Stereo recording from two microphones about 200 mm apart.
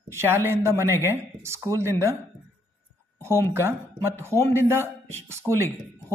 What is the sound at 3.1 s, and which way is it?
Speech, 15° right (ahead or behind).